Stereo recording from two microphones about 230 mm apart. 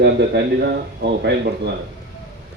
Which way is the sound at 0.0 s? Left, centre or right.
Right.